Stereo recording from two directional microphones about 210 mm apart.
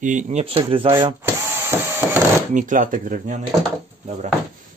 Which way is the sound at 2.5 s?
40° right (ahead or behind).